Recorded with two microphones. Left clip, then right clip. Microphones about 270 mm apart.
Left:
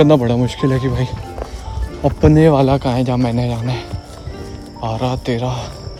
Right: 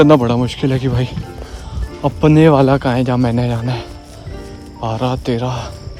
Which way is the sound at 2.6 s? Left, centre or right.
Right.